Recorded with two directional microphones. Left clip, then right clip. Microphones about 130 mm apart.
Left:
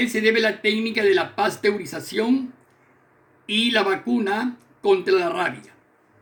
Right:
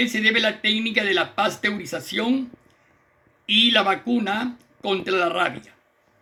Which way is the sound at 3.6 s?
90° right.